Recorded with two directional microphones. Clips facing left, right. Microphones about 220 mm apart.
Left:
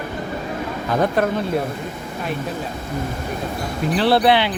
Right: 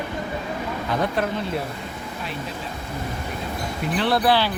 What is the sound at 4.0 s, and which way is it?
Speech, 30° left (ahead or behind).